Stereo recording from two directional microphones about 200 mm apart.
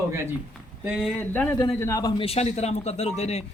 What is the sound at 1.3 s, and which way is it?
A man's voice, 10° left (ahead or behind).